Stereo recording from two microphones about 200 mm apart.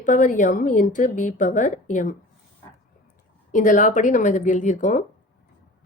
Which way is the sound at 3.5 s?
40° left (ahead or behind).